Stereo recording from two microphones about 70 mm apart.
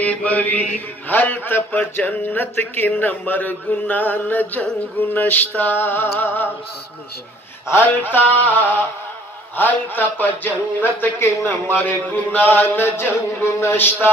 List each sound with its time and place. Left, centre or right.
0.0 s mantra: left
7.6 s mantra: left
9.6 s speech: left